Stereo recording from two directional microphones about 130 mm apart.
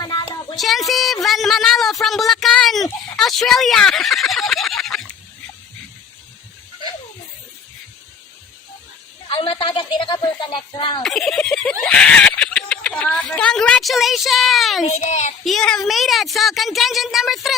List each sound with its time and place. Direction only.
0.0 s a sound: 35° left (ahead or behind)
0.5 s a woman's voice: centre (ahead or behind)
9.3 s a woman's voice: 40° left (ahead or behind)
11.0 s speech: centre (ahead or behind)
14.8 s a child's voice: 60° left (ahead or behind)
15.4 s speech: 5° left (ahead or behind)